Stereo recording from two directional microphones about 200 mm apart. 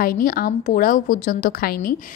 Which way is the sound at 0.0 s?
45° left (ahead or behind).